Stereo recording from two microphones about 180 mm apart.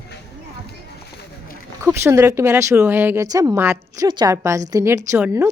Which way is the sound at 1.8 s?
15° right (ahead or behind).